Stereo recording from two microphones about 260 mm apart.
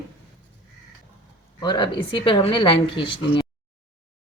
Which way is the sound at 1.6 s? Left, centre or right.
Centre.